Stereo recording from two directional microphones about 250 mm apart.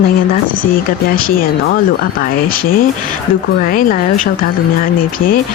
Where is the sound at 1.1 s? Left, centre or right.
Left.